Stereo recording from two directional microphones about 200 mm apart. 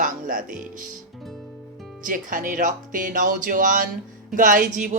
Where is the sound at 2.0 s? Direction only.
40° right (ahead or behind).